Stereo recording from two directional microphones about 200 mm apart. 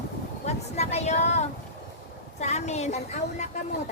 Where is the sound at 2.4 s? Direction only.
35° left (ahead or behind).